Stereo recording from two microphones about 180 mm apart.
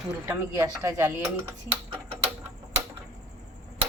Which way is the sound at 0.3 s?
15° right (ahead or behind).